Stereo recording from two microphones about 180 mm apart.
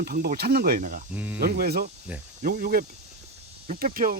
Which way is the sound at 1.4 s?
55° right (ahead or behind).